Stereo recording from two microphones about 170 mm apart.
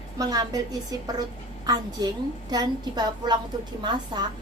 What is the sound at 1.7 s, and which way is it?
A child's voice, 20° right (ahead or behind).